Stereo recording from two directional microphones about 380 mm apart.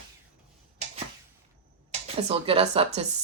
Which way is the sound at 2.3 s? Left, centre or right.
Centre.